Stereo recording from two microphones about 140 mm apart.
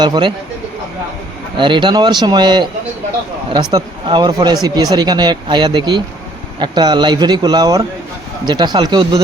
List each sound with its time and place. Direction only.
0.0 s speech: 35° right (ahead or behind)
1.5 s speech: 35° right (ahead or behind)